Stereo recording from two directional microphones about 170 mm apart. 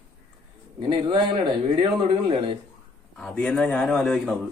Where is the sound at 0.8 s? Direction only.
25° right (ahead or behind).